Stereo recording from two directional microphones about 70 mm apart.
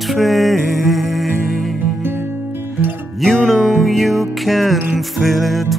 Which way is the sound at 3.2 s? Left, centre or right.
Centre.